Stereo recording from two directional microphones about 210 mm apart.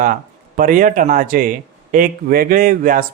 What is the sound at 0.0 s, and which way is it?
A man's voice, 40° right (ahead or behind).